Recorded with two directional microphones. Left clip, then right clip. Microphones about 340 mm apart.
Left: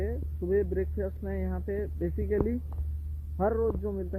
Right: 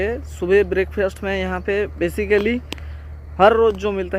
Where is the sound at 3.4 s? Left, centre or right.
Centre.